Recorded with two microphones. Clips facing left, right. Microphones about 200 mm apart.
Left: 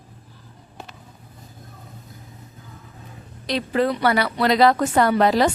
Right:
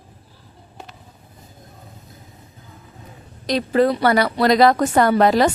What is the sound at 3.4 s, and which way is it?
Speech, 40° right (ahead or behind).